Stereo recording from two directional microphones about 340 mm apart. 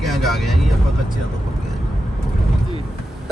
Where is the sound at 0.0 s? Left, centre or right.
Centre.